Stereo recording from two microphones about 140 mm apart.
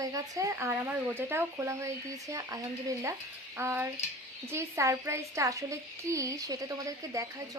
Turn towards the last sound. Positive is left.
turn(degrees=-25)  # may be behind; listen again after turning